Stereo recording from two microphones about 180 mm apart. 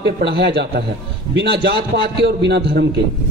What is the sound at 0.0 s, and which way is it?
A man's voice, 65° right (ahead or behind).